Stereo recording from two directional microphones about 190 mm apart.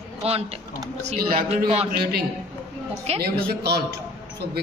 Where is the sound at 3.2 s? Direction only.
55° right (ahead or behind).